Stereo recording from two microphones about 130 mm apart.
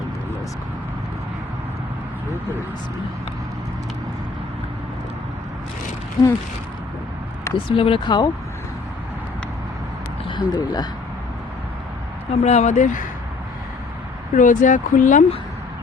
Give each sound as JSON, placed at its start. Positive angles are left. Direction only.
{"t": 6.2, "sound": "speech", "side_deg": 30}
{"t": 7.5, "sound": "speech", "side_deg": 40}
{"t": 10.2, "sound": "speech", "side_deg": 35}
{"t": 12.3, "sound": "speech", "side_deg": 60}
{"t": 14.3, "sound": "speech", "side_deg": 75}